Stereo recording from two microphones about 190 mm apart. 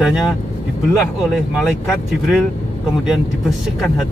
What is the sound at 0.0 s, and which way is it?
Speech, centre (ahead or behind).